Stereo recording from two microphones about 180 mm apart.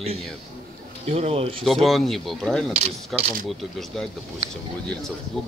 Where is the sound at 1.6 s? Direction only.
Centre (ahead or behind).